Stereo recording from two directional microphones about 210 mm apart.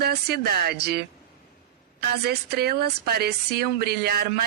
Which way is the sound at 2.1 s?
50° right (ahead or behind).